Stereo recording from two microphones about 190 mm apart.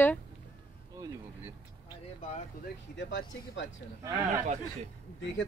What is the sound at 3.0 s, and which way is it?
Speech, 75° left (ahead or behind).